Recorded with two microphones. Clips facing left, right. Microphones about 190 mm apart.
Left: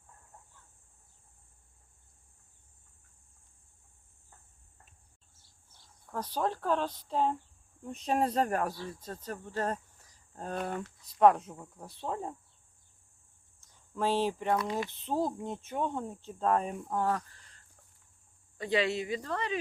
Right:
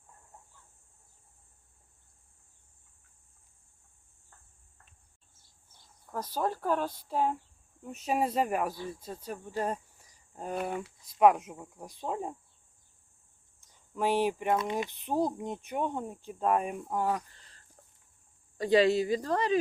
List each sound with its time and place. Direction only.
6.1 s speech: 10° right (ahead or behind)
13.6 s speech: 15° right (ahead or behind)
18.5 s speech: 35° right (ahead or behind)